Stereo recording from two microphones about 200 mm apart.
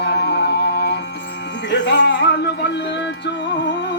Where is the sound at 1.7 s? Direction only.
60° left (ahead or behind).